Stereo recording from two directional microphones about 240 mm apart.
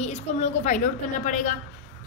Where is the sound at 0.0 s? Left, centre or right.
Left.